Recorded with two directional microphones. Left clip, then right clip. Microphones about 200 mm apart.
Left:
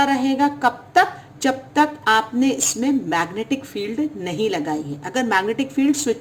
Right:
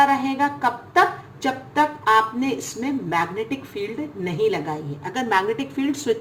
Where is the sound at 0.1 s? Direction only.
45° left (ahead or behind).